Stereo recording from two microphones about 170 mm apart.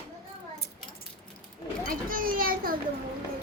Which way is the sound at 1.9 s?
55° right (ahead or behind).